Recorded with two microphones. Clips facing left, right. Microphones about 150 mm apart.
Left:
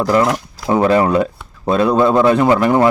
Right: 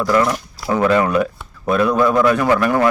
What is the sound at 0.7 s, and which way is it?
Speech, 30° left (ahead or behind).